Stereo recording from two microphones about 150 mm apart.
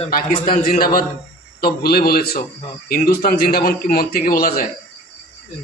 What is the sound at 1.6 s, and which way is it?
A man's voice, 90° left.